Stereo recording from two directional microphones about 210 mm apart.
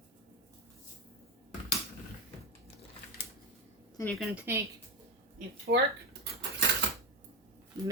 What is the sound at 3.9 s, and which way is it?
Speech, 10° left (ahead or behind).